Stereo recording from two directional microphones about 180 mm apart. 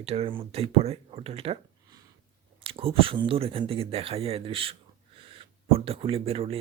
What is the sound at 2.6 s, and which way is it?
Speech, 30° right (ahead or behind).